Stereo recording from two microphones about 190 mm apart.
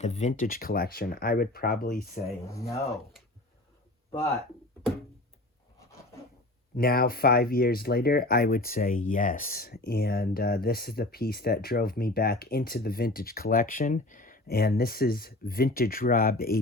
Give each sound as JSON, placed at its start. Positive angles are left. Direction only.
{"t": 0.0, "sound": "speech", "side_deg": 35}
{"t": 2.5, "sound": "speech", "side_deg": 15}
{"t": 6.7, "sound": "speech", "side_deg": 50}